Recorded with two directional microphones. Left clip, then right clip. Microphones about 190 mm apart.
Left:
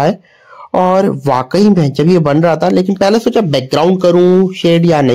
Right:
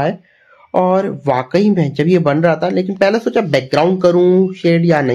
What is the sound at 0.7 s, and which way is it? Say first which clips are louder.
Speech: left 3 dB; 25° left (ahead or behind).